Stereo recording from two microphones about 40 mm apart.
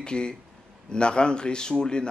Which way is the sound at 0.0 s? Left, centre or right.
Left.